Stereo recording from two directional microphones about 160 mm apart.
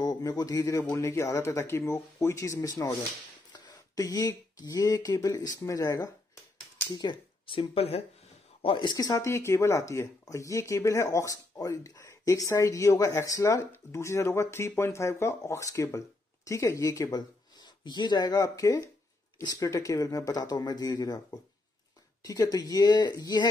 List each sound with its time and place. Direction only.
0.0 s speech: 20° left (ahead or behind)